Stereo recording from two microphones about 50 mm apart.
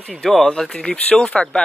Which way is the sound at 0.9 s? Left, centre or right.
Left.